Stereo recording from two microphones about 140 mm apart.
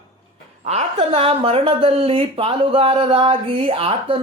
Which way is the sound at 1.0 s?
40° right (ahead or behind).